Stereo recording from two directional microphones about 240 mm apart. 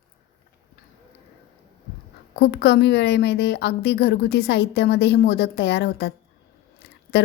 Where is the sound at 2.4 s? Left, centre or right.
Left.